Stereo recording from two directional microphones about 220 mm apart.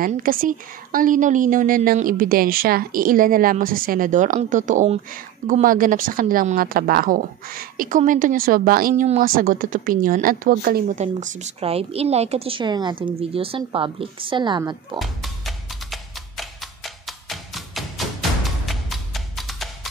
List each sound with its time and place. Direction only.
0.0 s a woman's voice: 40° right (ahead or behind); by 15.0 s 20° right (ahead or behind)
15.0 s music: centre (ahead or behind)